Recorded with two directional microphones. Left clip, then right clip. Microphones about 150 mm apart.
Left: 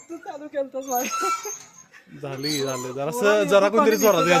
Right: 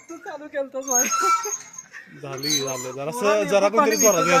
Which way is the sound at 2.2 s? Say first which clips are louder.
Right 1 dB; 90° left.